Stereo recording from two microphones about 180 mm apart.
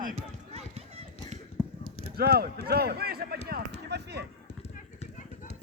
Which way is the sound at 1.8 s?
60° right (ahead or behind).